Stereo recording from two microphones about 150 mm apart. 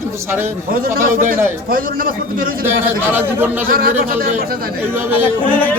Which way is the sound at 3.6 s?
75° right (ahead or behind).